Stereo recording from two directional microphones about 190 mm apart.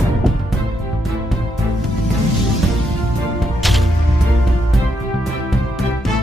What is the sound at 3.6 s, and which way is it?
Music, centre (ahead or behind).